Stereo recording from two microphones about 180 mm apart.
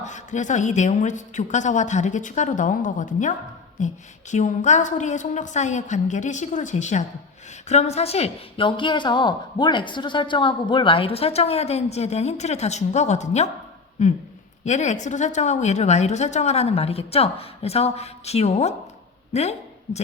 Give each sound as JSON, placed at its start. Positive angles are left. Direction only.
{"t": 0.0, "sound": "a woman's voice", "side_deg": 40}